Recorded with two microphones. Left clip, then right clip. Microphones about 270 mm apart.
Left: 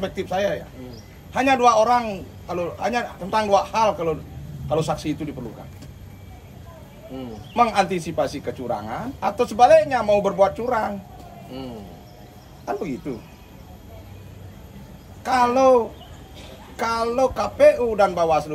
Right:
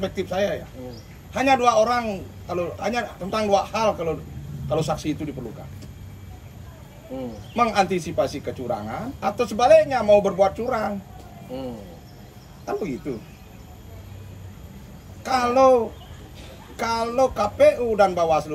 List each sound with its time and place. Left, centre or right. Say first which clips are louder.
0.0 s a man's voice: left 1 dB; centre
7.5 s a man's voice: left 1 dB; centre
11.5 s speech: right 3 dB; centre
15.2 s a man's voice: left 1 dB; centre